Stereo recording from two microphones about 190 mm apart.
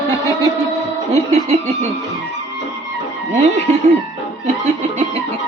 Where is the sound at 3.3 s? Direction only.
35° right (ahead or behind).